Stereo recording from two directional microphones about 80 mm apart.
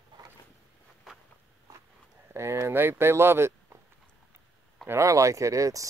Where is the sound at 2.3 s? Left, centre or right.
Right.